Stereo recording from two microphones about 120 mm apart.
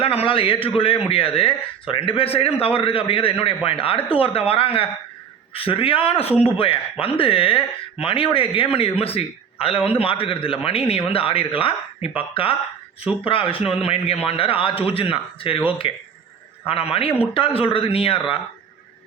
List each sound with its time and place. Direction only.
0.0 s speech: 50° left (ahead or behind)